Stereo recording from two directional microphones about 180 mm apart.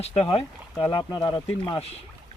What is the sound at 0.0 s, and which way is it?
Speech, 35° left (ahead or behind).